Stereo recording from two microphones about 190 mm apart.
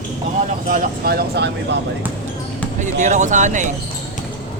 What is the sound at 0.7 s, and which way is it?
Speech, 50° right (ahead or behind).